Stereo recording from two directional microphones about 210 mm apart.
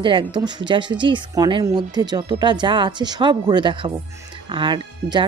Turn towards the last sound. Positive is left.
turn(degrees=-20)  # may be behind; listen again after turning